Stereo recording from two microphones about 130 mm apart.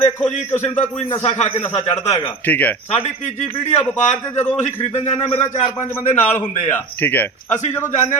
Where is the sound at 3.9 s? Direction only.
65° left (ahead or behind).